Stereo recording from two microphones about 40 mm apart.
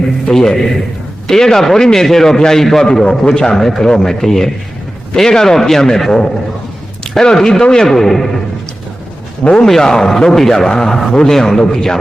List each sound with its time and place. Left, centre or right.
0.3 s a man's voice: centre
3.5 s a man's voice: centre
9.4 s a man's voice: left
9.6 s a man's voice: centre